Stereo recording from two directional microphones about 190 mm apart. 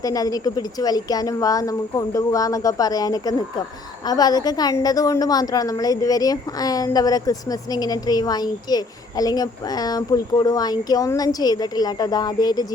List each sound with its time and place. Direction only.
0.0 s a woman's voice: 20° left (ahead or behind)